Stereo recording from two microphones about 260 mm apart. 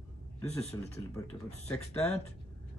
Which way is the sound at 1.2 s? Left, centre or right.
Centre.